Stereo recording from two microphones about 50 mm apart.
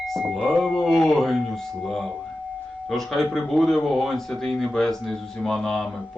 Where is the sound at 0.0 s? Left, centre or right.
Centre.